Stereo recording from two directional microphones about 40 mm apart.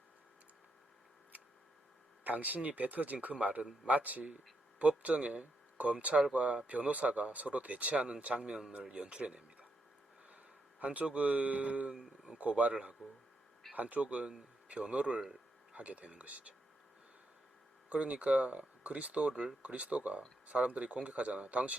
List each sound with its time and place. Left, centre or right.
2.2 s speech: right
10.8 s speech: right
17.8 s speech: right